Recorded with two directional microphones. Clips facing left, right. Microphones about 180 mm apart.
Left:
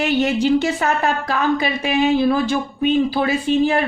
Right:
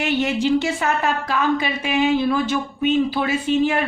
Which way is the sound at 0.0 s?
40° left (ahead or behind).